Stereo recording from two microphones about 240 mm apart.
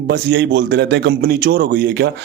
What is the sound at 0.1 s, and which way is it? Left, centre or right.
A man's voice, right.